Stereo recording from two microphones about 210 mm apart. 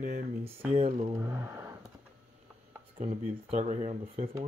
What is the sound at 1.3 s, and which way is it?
Speech, 10° right (ahead or behind).